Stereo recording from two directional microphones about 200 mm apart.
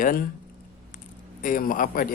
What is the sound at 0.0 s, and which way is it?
Speech, 45° left (ahead or behind).